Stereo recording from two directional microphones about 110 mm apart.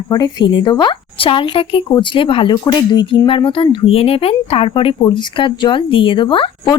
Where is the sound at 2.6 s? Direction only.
40° left (ahead or behind); by 4.9 s 60° left (ahead or behind).